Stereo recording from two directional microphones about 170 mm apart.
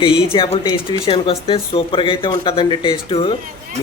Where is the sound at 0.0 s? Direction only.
30° left (ahead or behind).